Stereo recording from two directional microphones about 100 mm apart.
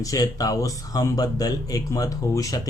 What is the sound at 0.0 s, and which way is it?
A man's voice, 35° left (ahead or behind).